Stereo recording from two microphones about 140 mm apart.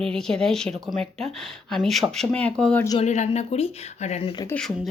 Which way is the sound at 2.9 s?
55° left (ahead or behind).